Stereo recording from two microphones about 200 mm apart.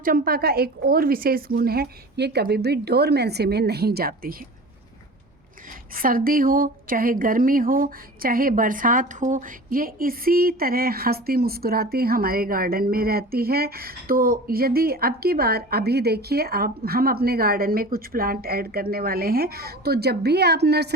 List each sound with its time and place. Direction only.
0.0 s speech: 45° right (ahead or behind)
5.9 s speech: 45° right (ahead or behind)